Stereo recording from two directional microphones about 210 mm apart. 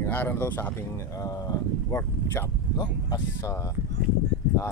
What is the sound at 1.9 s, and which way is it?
Speech, 20° left (ahead or behind).